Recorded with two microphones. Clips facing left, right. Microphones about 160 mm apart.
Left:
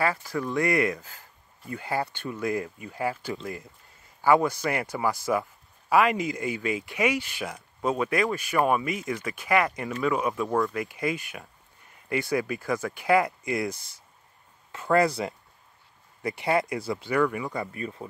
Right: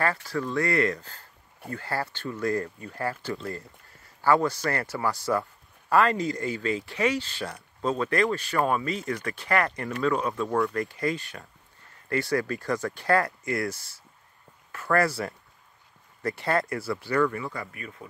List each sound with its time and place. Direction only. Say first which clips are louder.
0.0 s speech: even; 15° left (ahead or behind)
17.7 s speech: left 7 dB; 30° left (ahead or behind)